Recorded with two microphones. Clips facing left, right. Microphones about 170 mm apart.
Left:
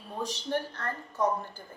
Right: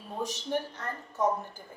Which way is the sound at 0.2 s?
15° right (ahead or behind).